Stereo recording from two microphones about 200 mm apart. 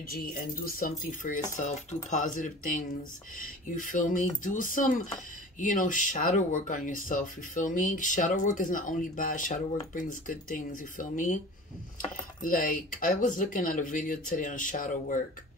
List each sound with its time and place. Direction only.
0.1 s speech: 45° left (ahead or behind)